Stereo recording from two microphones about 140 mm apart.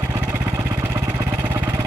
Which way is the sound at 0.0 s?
15° right (ahead or behind).